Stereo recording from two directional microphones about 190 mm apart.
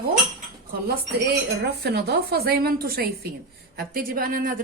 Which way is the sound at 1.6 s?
60° right (ahead or behind).